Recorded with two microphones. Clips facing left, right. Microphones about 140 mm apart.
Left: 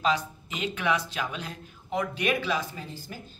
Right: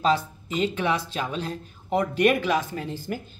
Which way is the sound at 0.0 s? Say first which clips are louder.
Right 4 dB; 35° right (ahead or behind).